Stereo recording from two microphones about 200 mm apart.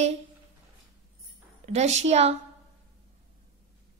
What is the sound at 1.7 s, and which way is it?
Speech, 35° right (ahead or behind).